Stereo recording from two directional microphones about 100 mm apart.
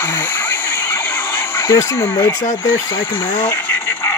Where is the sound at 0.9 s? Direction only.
25° left (ahead or behind).